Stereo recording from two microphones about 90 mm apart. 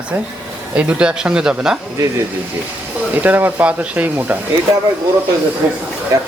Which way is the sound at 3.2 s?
20° right (ahead or behind).